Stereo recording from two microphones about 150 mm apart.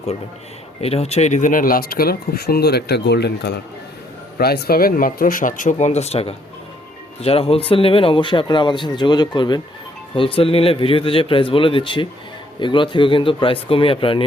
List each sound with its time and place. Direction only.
0.8 s speech: 45° left (ahead or behind)